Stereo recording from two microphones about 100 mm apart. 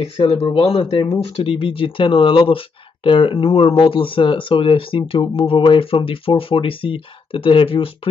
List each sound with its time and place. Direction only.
0.0 s speech: 75° left (ahead or behind)
0.8 s speech: 90° left
1.3 s speech: 65° left (ahead or behind)